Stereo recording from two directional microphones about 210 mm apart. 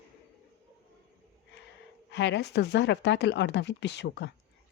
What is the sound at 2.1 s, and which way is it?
Speech, 55° left (ahead or behind).